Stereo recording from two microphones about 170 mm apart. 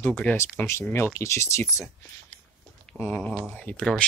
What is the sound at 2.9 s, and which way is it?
Speech, 10° left (ahead or behind).